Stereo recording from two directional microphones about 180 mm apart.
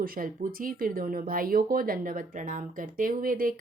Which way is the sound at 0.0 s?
55° right (ahead or behind).